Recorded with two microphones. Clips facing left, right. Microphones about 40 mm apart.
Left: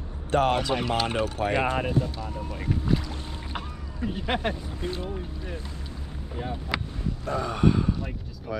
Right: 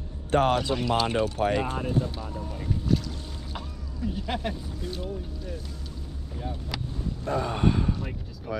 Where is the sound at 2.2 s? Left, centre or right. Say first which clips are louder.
Left 2 dB; left.